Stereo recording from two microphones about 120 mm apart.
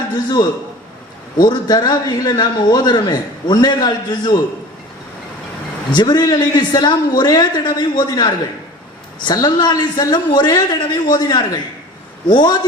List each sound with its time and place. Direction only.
0.1 s a man's voice: 35° left (ahead or behind)
1.5 s a man's voice: 35° left (ahead or behind)
5.9 s a man's voice: 35° left (ahead or behind)